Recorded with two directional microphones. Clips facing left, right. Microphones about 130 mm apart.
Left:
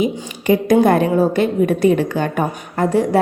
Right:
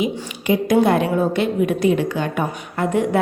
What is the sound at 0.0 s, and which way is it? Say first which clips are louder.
A woman's voice: left 3 dB; 45° left (ahead or behind).